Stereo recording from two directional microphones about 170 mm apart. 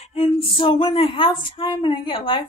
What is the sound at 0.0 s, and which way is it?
A woman's voice, 40° left (ahead or behind).